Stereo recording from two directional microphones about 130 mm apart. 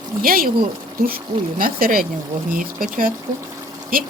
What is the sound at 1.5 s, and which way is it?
Speech, 90° right.